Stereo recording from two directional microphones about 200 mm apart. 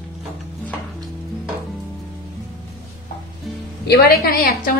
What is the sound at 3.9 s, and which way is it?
Speech, 50° left (ahead or behind).